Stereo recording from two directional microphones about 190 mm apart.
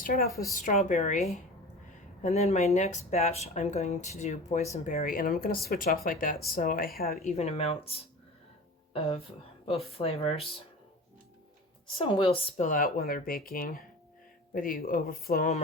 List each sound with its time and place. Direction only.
0.0 s speech: 50° left (ahead or behind)
7.3 s speech: 35° left (ahead or behind)
11.9 s speech: 30° left (ahead or behind); by 15.6 s 45° left (ahead or behind)